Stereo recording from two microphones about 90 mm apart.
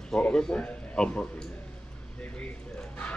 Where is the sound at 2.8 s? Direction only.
15° left (ahead or behind).